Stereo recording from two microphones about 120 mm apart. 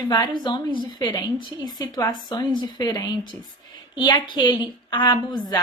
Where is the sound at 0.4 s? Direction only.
40° left (ahead or behind).